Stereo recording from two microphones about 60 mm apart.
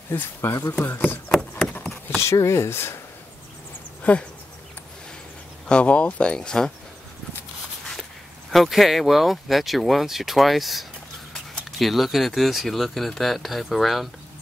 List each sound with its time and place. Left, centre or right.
0.1 s speech: left
1.6 s a sound: centre
2.4 s speech: left
4.0 s speech: left
5.7 s speech: centre
8.6 s speech: centre